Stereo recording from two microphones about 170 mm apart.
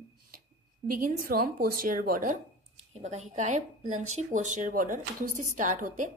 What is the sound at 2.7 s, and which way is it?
Speech, 35° right (ahead or behind).